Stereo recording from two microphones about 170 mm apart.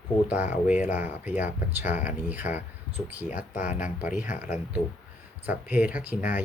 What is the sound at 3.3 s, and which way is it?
Speech, 50° left (ahead or behind).